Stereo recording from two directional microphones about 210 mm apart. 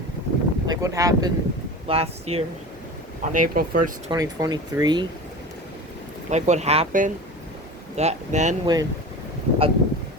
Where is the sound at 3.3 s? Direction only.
40° right (ahead or behind).